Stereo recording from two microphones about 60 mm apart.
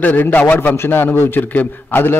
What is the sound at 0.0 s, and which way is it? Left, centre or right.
A man's voice, left.